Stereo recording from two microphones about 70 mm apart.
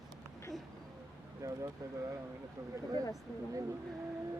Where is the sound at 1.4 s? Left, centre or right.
Right.